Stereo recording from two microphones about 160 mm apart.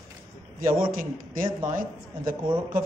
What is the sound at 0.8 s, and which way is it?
Speech, 60° right (ahead or behind).